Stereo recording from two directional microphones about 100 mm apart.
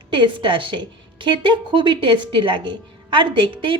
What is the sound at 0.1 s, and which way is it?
A woman's voice, 55° right (ahead or behind).